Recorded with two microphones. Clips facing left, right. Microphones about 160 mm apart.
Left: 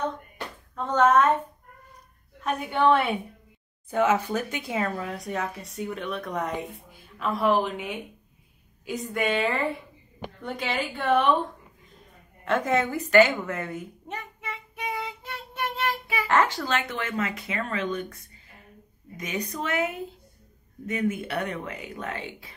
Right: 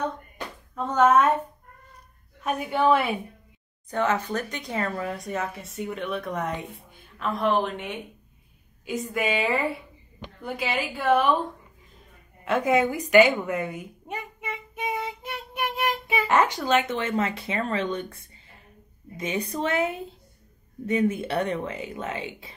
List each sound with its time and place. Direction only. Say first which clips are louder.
0.7 s a woman's voice: right 1 dB; 5° right (ahead or behind)
2.4 s a woman's voice: even; 5° right (ahead or behind)
3.9 s speech: left 2 dB; 10° left (ahead or behind)
12.4 s a sound: right 2 dB; 10° right (ahead or behind)
17.1 s speech: right 3 dB; 30° right (ahead or behind)